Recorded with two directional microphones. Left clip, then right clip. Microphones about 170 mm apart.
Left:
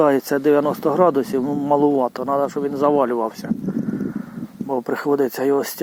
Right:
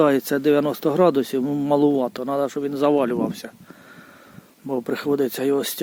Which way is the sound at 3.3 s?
45° right (ahead or behind).